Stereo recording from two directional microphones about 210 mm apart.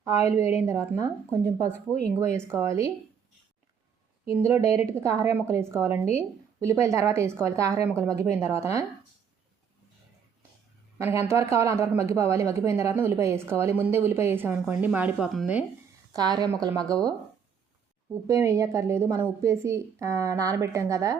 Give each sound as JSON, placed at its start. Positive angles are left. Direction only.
{"t": 0.0, "sound": "speech", "side_deg": -15}
{"t": 4.4, "sound": "speech", "side_deg": -15}
{"t": 10.9, "sound": "speech", "side_deg": -10}
{"t": 16.1, "sound": "speech", "side_deg": -20}
{"t": 18.1, "sound": "speech", "side_deg": -15}